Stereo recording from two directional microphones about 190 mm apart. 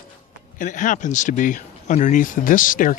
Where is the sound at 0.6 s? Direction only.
45° left (ahead or behind).